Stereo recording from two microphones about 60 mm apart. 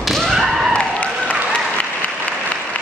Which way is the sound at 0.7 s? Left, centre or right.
Left.